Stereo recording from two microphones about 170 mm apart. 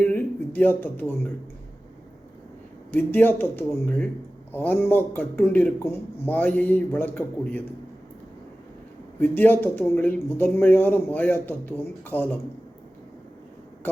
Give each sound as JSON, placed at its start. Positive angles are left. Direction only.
{"t": 0.0, "sound": "speech", "side_deg": 10}
{"t": 2.9, "sound": "speech", "side_deg": 10}
{"t": 9.2, "sound": "speech", "side_deg": 10}